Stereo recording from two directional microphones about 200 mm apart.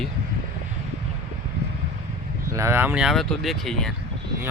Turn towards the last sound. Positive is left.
turn(degrees=0)  # may be behind; listen again after turning